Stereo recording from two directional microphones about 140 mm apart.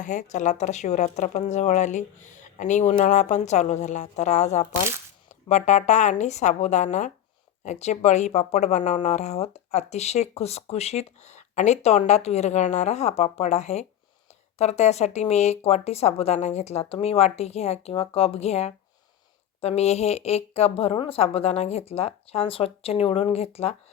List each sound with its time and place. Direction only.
0.0 s speech: 60° left (ahead or behind); by 23.7 s 45° left (ahead or behind)